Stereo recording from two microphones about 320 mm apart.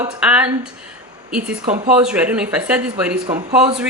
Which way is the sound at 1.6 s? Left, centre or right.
Centre.